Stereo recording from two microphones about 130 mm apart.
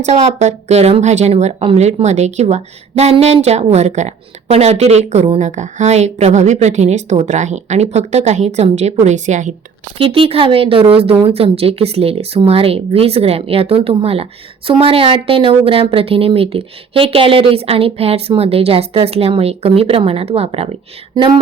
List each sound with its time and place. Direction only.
0.0 s a woman's voice: 60° right (ahead or behind)
10.0 s a woman's voice: 45° right (ahead or behind)